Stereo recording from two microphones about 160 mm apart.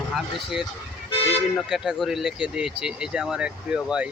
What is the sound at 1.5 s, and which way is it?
Speech, centre (ahead or behind).